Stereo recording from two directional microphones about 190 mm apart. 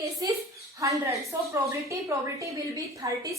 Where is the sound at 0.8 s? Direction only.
15° right (ahead or behind).